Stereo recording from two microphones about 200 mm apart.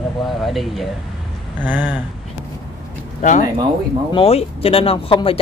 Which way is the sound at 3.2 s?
40° left (ahead or behind).